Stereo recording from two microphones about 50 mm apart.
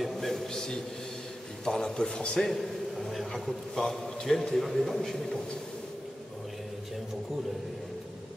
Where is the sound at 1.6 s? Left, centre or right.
Centre.